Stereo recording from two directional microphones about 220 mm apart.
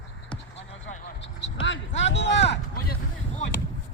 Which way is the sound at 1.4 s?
55° left (ahead or behind).